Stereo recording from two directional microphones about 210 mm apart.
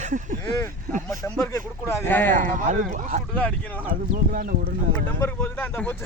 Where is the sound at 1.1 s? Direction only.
15° left (ahead or behind).